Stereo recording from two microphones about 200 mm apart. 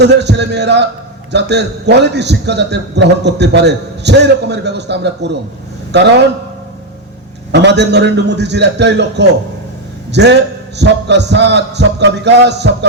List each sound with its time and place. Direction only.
0.0 s a man's voice: 60° right (ahead or behind)
7.5 s a man's voice: 60° right (ahead or behind)